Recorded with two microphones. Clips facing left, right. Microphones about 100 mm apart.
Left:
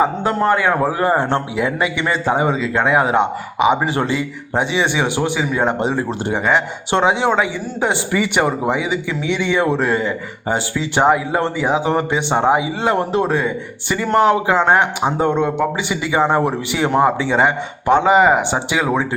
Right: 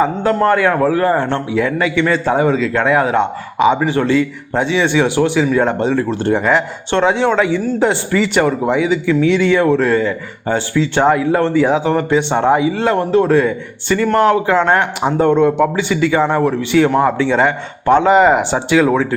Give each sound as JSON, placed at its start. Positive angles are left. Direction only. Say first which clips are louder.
{"t": 0.0, "sound": "a man's voice", "louder": "right 3 dB", "side_deg": 10}
{"t": 6.3, "sound": "a man's voice", "louder": "right 2 dB", "side_deg": 0}
{"t": 13.3, "sound": "a man's voice", "louder": "right 6 dB", "side_deg": 5}